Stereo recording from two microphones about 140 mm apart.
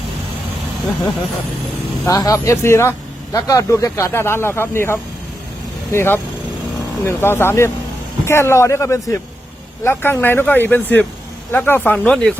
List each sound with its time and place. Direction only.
2.0 s speech: 25° left (ahead or behind); by 12.3 s 5° left (ahead or behind)